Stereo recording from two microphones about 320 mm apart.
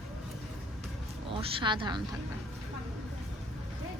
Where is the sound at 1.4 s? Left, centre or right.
Centre.